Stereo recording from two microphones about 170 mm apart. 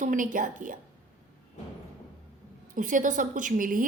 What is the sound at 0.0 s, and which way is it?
Speech, 50° right (ahead or behind).